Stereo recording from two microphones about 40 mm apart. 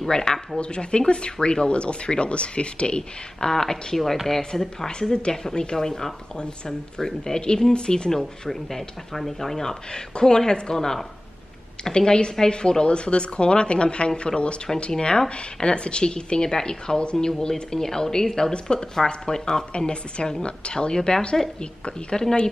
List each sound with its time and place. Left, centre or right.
0.1 s speech: centre
3.0 s speech: centre
6.3 s speech: left
8.1 s speech: centre
19.7 s speech: left